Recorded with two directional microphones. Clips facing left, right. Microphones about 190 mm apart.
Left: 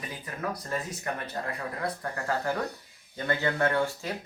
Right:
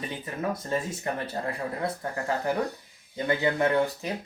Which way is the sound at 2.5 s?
15° right (ahead or behind).